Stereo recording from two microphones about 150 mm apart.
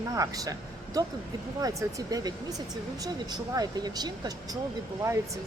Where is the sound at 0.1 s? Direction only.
25° right (ahead or behind).